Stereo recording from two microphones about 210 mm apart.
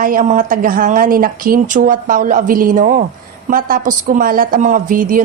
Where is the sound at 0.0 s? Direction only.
40° right (ahead or behind).